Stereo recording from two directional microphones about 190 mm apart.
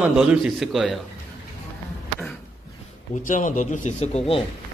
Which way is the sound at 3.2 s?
45° left (ahead or behind).